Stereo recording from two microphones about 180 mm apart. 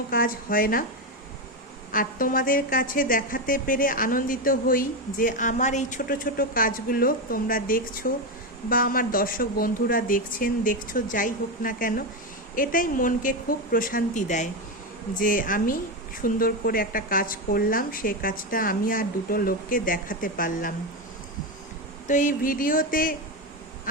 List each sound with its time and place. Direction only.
0.1 s a woman's voice: 50° left (ahead or behind)
1.9 s a woman's voice: 50° left (ahead or behind)
22.0 s a woman's voice: 45° left (ahead or behind)